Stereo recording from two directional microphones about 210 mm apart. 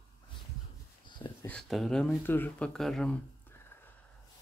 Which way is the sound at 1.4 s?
5° left (ahead or behind).